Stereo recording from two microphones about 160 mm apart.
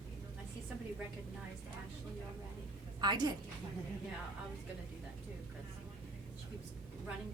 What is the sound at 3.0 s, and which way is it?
Speech, 25° right (ahead or behind).